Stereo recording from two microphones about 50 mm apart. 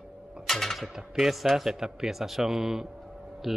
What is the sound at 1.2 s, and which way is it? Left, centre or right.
A man's voice, centre.